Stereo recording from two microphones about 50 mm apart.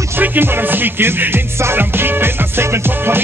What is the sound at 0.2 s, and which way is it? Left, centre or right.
Music, right.